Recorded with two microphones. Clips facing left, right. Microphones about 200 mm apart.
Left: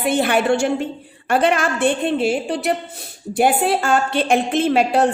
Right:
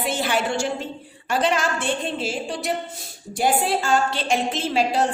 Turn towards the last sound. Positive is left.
turn(degrees=60)  # may be behind; listen again after turning